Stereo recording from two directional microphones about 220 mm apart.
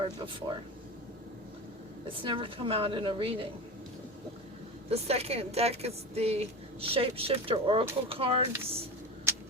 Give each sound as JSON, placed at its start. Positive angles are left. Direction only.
{"t": 2.1, "sound": "speech", "side_deg": -25}
{"t": 4.9, "sound": "speech", "side_deg": -30}